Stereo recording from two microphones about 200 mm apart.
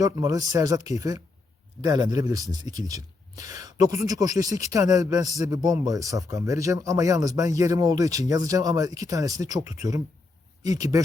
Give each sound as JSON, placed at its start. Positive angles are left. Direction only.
{"t": 0.0, "sound": "speech", "side_deg": -15}